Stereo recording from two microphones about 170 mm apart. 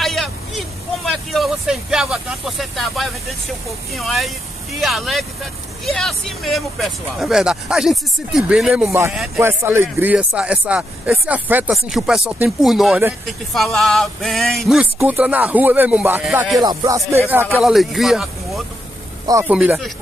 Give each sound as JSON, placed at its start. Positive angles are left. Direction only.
{"t": 0.0, "sound": "vehicle", "side_deg": 0}
{"t": 3.9, "sound": "speech", "side_deg": 0}
{"t": 9.4, "sound": "speech", "side_deg": -15}
{"t": 16.5, "sound": "music", "side_deg": -20}
{"t": 17.3, "sound": "a man's voice", "side_deg": -10}